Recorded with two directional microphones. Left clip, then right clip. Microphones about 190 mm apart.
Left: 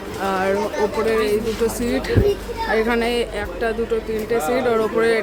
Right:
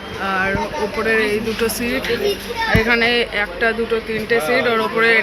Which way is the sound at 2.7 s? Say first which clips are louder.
Right 4 dB; 20° left (ahead or behind).